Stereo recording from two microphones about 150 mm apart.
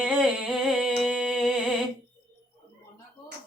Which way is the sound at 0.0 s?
5° right (ahead or behind).